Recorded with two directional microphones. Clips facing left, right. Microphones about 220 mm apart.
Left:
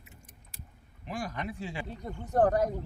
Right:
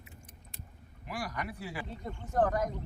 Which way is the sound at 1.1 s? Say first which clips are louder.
Left 2 dB; 25° left (ahead or behind).